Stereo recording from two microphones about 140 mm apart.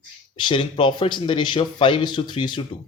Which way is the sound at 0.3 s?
35° left (ahead or behind).